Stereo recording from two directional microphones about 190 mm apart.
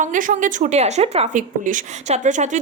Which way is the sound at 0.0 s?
45° right (ahead or behind).